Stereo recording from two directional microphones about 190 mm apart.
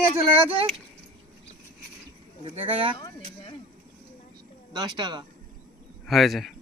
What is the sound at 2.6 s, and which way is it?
Speech, 30° right (ahead or behind).